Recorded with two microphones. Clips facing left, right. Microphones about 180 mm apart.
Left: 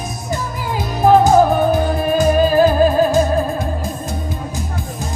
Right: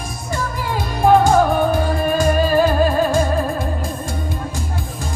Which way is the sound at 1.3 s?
Centre (ahead or behind).